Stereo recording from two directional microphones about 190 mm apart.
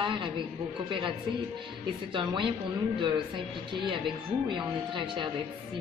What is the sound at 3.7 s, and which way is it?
A woman's voice, 25° right (ahead or behind).